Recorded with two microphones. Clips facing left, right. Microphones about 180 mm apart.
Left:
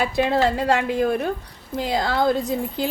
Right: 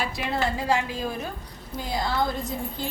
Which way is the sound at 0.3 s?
75° left (ahead or behind).